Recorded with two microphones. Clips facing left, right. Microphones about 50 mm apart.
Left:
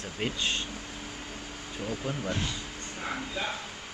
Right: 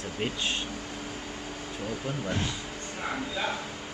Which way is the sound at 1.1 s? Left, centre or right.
Centre.